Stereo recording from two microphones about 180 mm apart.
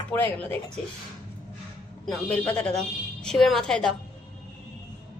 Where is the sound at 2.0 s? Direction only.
5° left (ahead or behind).